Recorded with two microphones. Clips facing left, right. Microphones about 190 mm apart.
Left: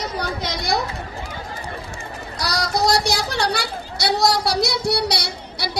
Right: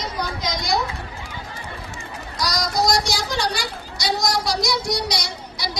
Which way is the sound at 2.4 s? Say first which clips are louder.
Left 1 dB; 65° left (ahead or behind).